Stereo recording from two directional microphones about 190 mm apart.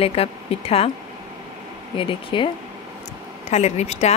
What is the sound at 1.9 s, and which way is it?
Speech, 25° left (ahead or behind).